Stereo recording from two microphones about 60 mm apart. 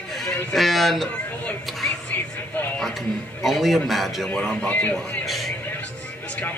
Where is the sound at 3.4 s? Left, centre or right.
Centre.